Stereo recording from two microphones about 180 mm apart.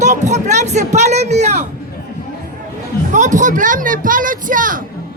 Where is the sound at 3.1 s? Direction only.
45° right (ahead or behind).